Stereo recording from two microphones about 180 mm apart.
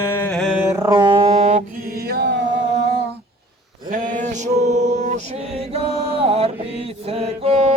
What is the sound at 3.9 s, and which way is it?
Mantra, 45° right (ahead or behind).